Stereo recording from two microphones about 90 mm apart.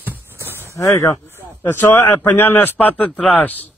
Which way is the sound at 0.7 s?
35° left (ahead or behind).